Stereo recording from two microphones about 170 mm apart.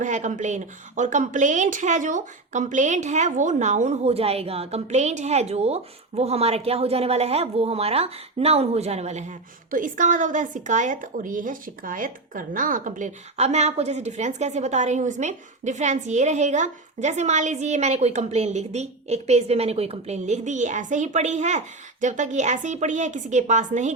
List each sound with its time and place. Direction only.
0.0 s a woman's voice: 45° right (ahead or behind)